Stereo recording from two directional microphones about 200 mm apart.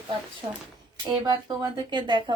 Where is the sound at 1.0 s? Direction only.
20° right (ahead or behind).